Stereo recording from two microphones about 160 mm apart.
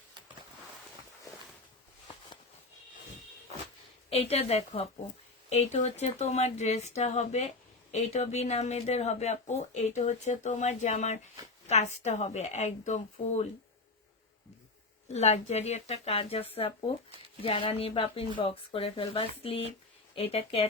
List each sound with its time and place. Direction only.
4.1 s speech: 40° left (ahead or behind)
15.0 s speech: 45° left (ahead or behind)